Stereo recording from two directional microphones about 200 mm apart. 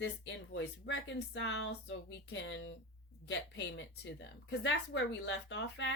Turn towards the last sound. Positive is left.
turn(degrees=60)  # may be behind; listen again after turning